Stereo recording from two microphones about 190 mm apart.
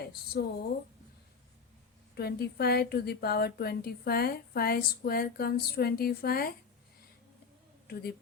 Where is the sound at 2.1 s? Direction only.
55° left (ahead or behind).